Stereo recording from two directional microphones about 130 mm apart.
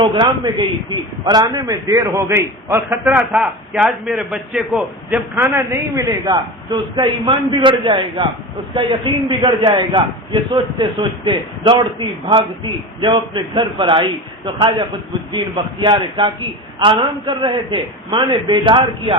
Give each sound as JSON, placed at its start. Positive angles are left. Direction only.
{"t": 0.0, "sound": "a man's voice", "side_deg": -40}
{"t": 3.3, "sound": "a man's voice", "side_deg": 0}